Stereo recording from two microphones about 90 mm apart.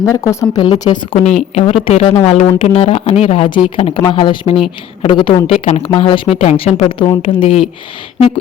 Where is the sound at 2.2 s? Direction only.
90° left.